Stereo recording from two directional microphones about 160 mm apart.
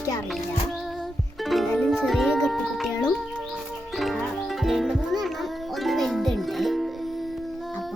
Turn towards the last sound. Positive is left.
turn(degrees=0)  # may be behind; listen again after turning